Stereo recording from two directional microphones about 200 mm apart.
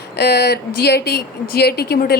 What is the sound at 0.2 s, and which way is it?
Speech, 55° left (ahead or behind).